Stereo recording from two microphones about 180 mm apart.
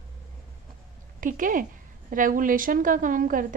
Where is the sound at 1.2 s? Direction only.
50° right (ahead or behind).